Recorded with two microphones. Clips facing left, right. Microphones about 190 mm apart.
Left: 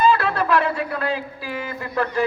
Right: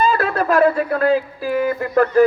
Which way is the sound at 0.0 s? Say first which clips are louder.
Right 1 dB; 50° right (ahead or behind).